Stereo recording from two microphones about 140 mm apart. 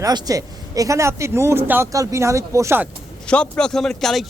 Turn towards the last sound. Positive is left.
turn(degrees=5)  # may be behind; listen again after turning